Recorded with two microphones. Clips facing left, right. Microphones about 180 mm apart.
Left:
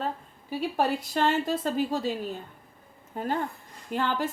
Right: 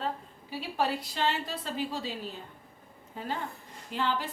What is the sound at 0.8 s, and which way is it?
A woman's voice, 50° left (ahead or behind).